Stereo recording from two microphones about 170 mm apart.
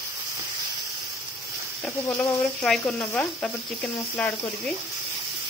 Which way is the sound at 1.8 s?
15° left (ahead or behind).